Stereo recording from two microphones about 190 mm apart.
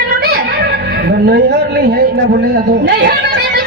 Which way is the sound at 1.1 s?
60° right (ahead or behind).